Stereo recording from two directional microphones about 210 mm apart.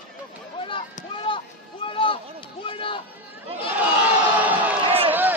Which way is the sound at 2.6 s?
25° left (ahead or behind).